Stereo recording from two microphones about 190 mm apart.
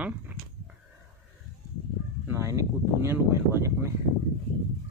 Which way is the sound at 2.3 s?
15° right (ahead or behind).